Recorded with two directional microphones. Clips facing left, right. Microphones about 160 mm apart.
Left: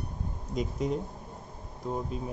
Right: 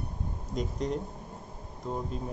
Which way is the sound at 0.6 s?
5° left (ahead or behind).